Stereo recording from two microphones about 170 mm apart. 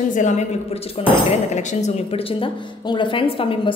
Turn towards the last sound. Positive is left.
turn(degrees=30)  # may be behind; listen again after turning